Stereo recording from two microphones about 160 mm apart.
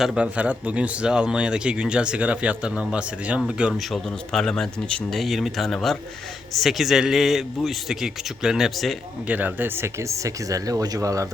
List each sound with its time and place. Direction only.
0.0 s speech: 5° right (ahead or behind); by 11.3 s 20° right (ahead or behind)